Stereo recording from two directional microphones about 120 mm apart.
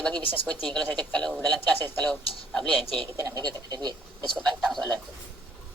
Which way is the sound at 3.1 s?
30° right (ahead or behind).